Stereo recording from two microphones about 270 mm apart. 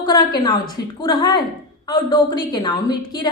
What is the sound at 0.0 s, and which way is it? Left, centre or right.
A woman's voice, centre.